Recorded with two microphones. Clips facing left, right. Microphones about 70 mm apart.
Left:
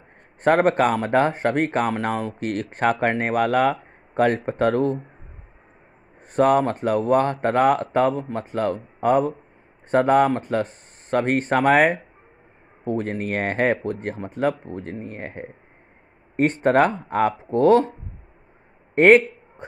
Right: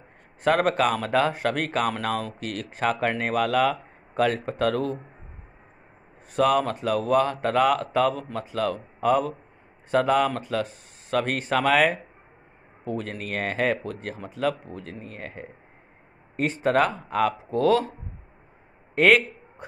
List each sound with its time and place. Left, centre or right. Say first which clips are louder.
0.4 s speech: left 4 dB; left
2.3 s speech: left 6 dB; left
6.3 s speech: left 4 dB; left
12.8 s speech: left 6 dB; left
18.9 s speech: left 5 dB; left